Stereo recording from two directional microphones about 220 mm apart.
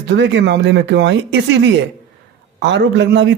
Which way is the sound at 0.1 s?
55° right (ahead or behind).